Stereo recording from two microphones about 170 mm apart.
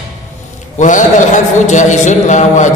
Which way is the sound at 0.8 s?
45° left (ahead or behind).